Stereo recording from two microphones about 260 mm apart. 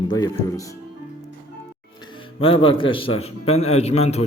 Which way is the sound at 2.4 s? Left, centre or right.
Left.